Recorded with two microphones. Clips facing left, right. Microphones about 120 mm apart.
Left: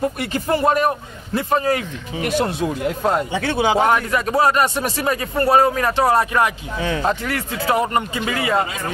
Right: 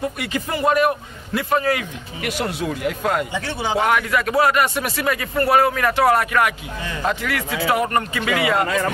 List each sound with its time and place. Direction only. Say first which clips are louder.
0.2 s a man's voice: left 2 dB; 40° left (ahead or behind)
3.3 s speech: left 6 dB; 70° left (ahead or behind)
3.7 s a man's voice: right 3 dB; 30° left (ahead or behind)
7.9 s speech: even; 20° left (ahead or behind)
8.3 s a man's voice: right 3 dB; 30° left (ahead or behind)
8.6 s speech: right 6 dB; 70° right (ahead or behind)